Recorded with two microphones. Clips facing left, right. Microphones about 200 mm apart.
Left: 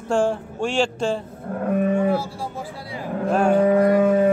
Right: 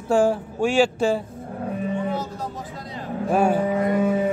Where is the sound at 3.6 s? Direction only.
65° left (ahead or behind).